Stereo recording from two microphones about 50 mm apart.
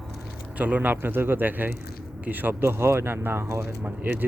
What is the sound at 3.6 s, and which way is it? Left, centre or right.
Speech, right.